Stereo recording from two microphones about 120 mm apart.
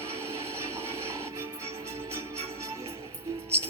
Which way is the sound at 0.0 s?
20° right (ahead or behind).